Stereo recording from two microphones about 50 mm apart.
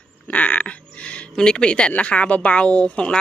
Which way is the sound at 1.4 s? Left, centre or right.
Centre.